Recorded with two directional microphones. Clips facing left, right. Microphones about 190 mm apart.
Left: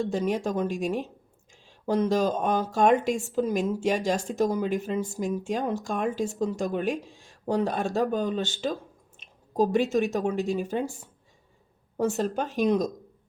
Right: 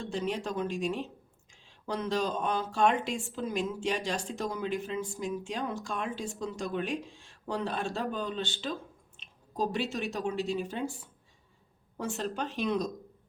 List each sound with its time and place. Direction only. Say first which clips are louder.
0.0 s speech: left 7 dB; 45° left (ahead or behind)